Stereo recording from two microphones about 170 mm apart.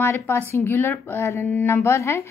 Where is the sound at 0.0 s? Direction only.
15° left (ahead or behind).